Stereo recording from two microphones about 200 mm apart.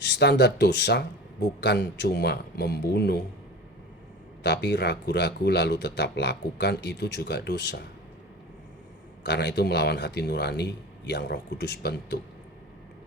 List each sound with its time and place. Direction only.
0.0 s speech: 60° left (ahead or behind)
4.4 s speech: 60° left (ahead or behind)
9.2 s speech: 55° left (ahead or behind)